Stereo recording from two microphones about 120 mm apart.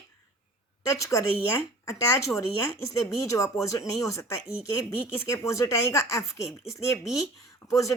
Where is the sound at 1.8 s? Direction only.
25° left (ahead or behind).